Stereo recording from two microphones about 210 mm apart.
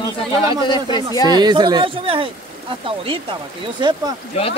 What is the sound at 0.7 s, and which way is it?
Speech, 20° left (ahead or behind).